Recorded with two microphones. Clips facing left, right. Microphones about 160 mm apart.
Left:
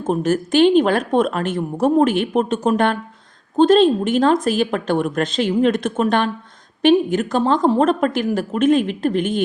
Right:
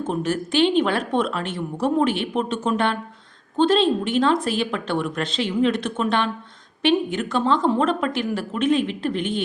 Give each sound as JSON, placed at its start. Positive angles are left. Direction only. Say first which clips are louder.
{"t": 0.0, "sound": "speech", "louder": "left 5 dB", "side_deg": 45}